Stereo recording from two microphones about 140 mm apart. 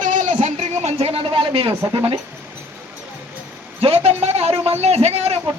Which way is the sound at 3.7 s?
45° right (ahead or behind).